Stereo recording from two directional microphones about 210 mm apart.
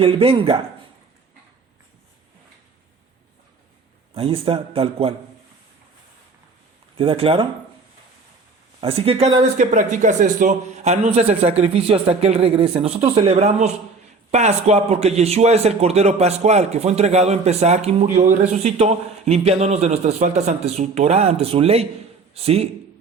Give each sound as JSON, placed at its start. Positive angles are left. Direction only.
{"t": 0.0, "sound": "speech", "side_deg": -25}
{"t": 4.1, "sound": "speech", "side_deg": -25}
{"t": 6.9, "sound": "speech", "side_deg": -25}
{"t": 8.8, "sound": "a man's voice", "side_deg": -25}